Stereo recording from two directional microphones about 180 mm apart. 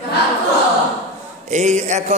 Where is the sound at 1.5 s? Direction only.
40° right (ahead or behind).